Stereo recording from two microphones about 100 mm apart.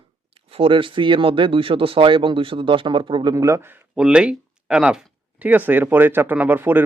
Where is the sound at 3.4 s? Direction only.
30° right (ahead or behind).